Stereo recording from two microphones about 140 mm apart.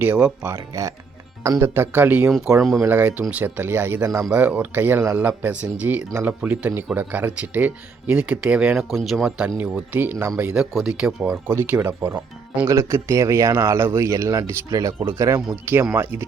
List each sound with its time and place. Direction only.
0.0 s speech: 15° right (ahead or behind)
2.6 s speech: centre (ahead or behind)
2.8 s speech: 15° right (ahead or behind)
4.3 s speech: 10° right (ahead or behind)
10.4 s speech: 5° right (ahead or behind)